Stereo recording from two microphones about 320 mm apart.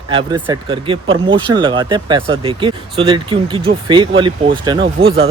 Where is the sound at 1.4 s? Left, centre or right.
Centre.